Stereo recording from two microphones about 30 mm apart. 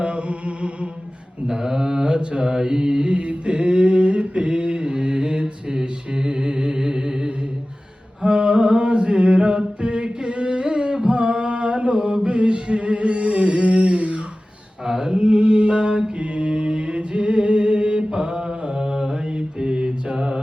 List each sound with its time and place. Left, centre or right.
0.0 s music: right
1.5 s mantra: centre
8.2 s mantra: right
14.8 s mantra: centre
15.2 s mantra: right
18.1 s mantra: right
19.3 s mantra: right